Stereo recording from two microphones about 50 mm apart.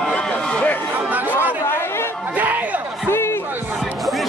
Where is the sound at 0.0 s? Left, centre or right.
Centre.